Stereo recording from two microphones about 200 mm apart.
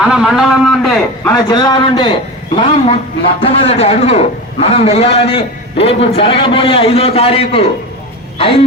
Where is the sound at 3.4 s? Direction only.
30° left (ahead or behind).